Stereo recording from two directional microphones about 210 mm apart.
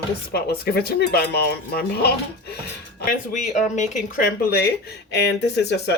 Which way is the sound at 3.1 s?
35° left (ahead or behind).